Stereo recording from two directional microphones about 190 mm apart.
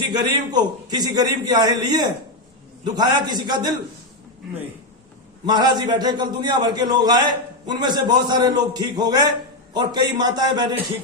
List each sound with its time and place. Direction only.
0.1 s a man's voice: 20° right (ahead or behind)
5.5 s a man's voice: 20° right (ahead or behind)